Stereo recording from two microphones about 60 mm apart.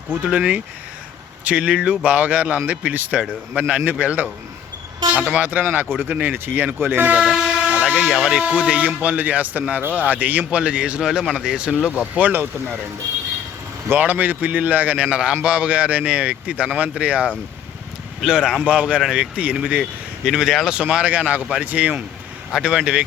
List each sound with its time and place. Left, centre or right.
0.3 s speech: right
7.3 s vehicle: centre
7.7 s a sound: right
8.0 s speech: centre
8.4 s speech: centre
11.8 s speech: left
13.9 s speech: right
15.1 s speech: centre
19.8 s speech: centre; by 22.0 s right
22.6 s speech: centre